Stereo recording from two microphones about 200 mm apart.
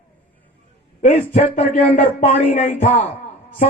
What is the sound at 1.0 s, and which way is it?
A man's voice, 35° left (ahead or behind).